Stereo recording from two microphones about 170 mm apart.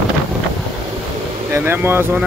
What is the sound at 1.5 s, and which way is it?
Speech, 15° right (ahead or behind).